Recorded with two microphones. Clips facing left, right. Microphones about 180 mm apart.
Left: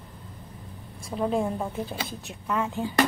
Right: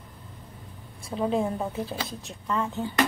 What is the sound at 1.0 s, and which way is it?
A woman's voice, centre (ahead or behind).